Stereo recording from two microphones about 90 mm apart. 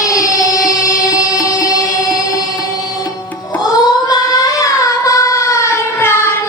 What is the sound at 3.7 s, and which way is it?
Child singing, 40° left (ahead or behind).